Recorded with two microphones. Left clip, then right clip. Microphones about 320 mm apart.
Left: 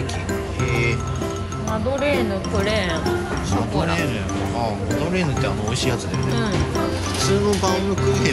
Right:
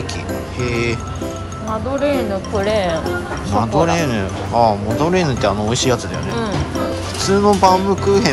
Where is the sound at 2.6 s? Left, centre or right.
Right.